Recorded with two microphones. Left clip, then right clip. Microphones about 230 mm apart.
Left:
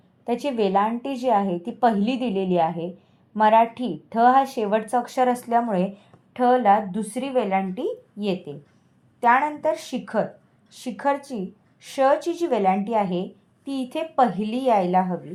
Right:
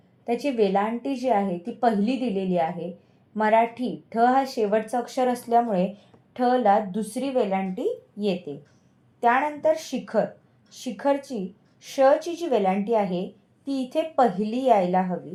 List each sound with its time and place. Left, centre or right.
0.3 s a woman's voice: left